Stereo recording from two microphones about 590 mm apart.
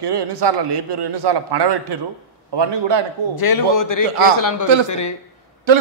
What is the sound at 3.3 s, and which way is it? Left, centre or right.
A man's voice, left.